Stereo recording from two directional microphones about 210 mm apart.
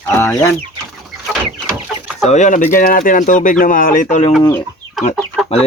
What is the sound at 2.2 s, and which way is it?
Speech, 35° left (ahead or behind).